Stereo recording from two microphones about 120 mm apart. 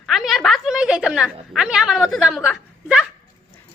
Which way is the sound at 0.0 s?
Centre (ahead or behind).